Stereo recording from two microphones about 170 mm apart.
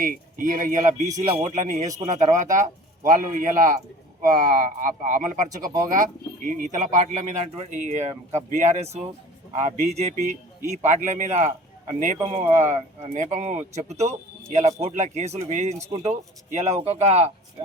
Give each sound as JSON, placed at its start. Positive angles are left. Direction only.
{"t": 0.0, "sound": "speech", "side_deg": -50}